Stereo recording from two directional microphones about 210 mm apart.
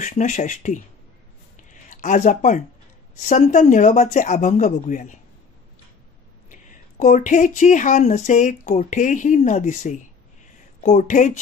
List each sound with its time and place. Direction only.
0.0 s speech: 35° left (ahead or behind)
1.6 s a sound: 35° left (ahead or behind)
3.2 s speech: 35° left (ahead or behind)
6.5 s speech: 35° left (ahead or behind)